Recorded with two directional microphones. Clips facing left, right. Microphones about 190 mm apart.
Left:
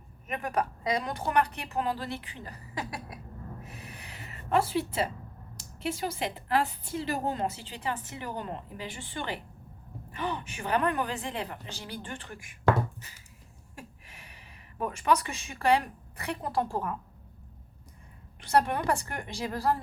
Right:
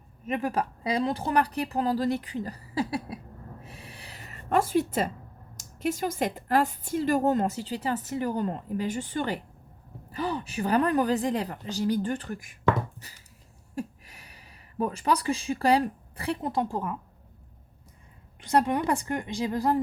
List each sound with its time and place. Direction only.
0.3 s a woman's voice: 25° right (ahead or behind)
3.6 s a sound: 30° right (ahead or behind); by 5.1 s 45° right (ahead or behind)
5.5 s a woman's voice: 45° right (ahead or behind)
13.7 s speech: 40° right (ahead or behind); by 17.0 s 20° right (ahead or behind)
18.4 s a woman's voice: 15° right (ahead or behind)